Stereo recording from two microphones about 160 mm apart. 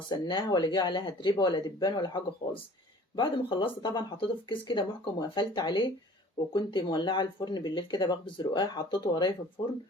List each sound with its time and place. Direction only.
0.1 s speech: 25° left (ahead or behind)